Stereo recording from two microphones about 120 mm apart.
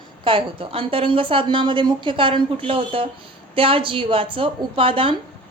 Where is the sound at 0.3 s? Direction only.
45° right (ahead or behind).